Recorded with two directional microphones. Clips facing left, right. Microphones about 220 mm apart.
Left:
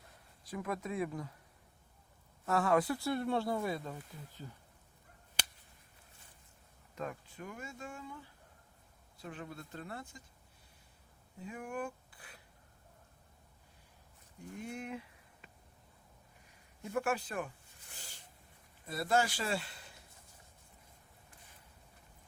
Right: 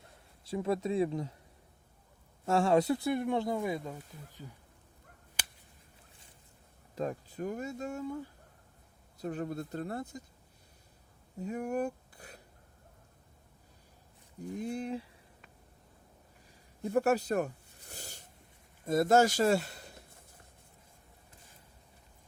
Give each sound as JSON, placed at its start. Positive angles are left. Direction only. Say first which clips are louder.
{"t": 0.4, "sound": "speech", "louder": "right 7 dB", "side_deg": -25}
{"t": 2.5, "sound": "speech", "louder": "right 4 dB", "side_deg": -25}
{"t": 4.4, "sound": "speech", "louder": "right 1 dB", "side_deg": -5}
{"t": 6.9, "sound": "speech", "louder": "right 7 dB", "side_deg": -35}
{"t": 11.3, "sound": "speech", "louder": "right 8 dB", "side_deg": -40}
{"t": 14.6, "sound": "speech", "louder": "right 6 dB", "side_deg": -35}
{"t": 16.8, "sound": "a sound", "louder": "right 7 dB", "side_deg": -35}
{"t": 18.9, "sound": "speech", "louder": "right 8 dB", "side_deg": -45}